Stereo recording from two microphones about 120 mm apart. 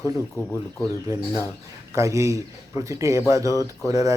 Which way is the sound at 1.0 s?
25° right (ahead or behind).